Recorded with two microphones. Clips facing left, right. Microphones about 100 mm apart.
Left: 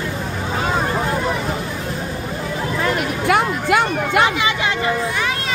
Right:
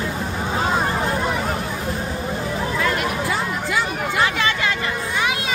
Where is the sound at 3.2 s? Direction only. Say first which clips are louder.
Left 6 dB; 65° left (ahead or behind).